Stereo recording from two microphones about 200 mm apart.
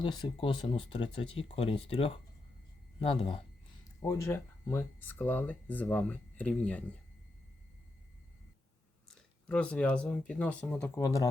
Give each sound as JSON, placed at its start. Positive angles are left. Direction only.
{"t": 0.0, "sound": "speech", "side_deg": 20}
{"t": 4.0, "sound": "speech", "side_deg": 15}
{"t": 9.0, "sound": "speech", "side_deg": 5}